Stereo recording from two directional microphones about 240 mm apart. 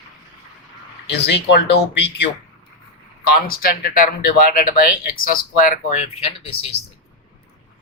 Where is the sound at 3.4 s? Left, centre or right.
Left.